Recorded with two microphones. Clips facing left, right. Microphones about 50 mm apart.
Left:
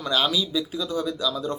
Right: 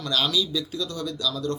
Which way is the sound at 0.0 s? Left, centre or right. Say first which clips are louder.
Left 1 dB; centre.